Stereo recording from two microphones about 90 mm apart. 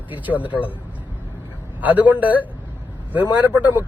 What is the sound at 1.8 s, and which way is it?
Speech, 20° right (ahead or behind).